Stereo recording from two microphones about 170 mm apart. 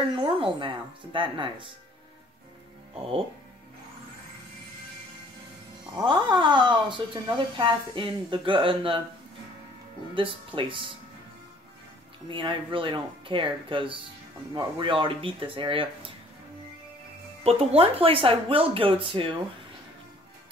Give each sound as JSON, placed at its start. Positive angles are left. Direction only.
{"t": 0.1, "sound": "speech", "side_deg": -30}
{"t": 6.0, "sound": "speech", "side_deg": -30}
{"t": 10.1, "sound": "speech", "side_deg": -30}
{"t": 12.3, "sound": "speech", "side_deg": -30}
{"t": 17.4, "sound": "speech", "side_deg": -35}